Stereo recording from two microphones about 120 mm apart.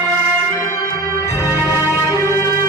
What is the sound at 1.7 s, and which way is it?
Music, 20° right (ahead or behind).